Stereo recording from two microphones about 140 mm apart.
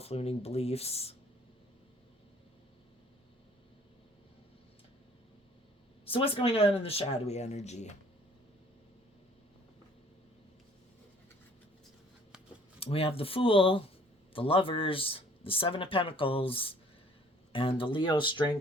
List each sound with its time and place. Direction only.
0.0 s speech: 45° left (ahead or behind)
6.1 s speech: 40° left (ahead or behind)
12.8 s speech: 45° left (ahead or behind)